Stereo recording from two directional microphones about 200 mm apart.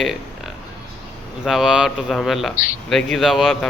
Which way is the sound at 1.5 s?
Centre (ahead or behind).